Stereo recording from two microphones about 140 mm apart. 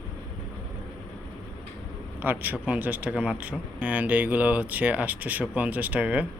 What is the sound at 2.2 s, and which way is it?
A man's voice, 15° right (ahead or behind).